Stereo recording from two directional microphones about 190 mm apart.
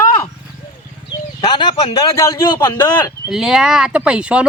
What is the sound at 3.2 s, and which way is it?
Speech, 5° right (ahead or behind).